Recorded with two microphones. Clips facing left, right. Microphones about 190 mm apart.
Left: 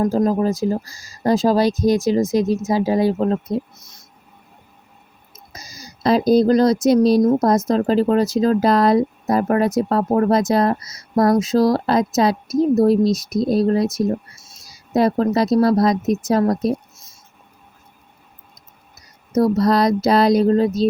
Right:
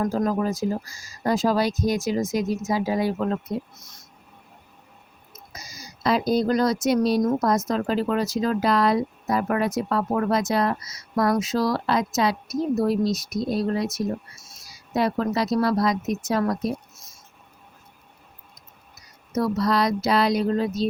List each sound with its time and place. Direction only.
0.0 s speech: 30° left (ahead or behind)
5.5 s speech: 35° left (ahead or behind)
19.3 s speech: 40° left (ahead or behind)